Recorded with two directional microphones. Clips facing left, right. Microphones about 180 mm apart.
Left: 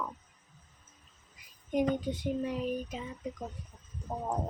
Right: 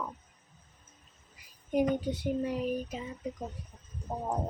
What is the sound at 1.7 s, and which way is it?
Child singing, 10° right (ahead or behind).